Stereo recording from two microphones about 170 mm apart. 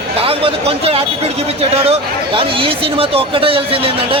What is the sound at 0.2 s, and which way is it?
A man's voice, 35° right (ahead or behind).